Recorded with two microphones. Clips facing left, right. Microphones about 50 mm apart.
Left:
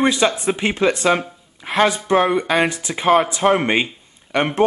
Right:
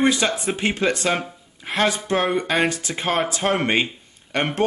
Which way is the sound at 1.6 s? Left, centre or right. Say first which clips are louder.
Left 5 dB; centre.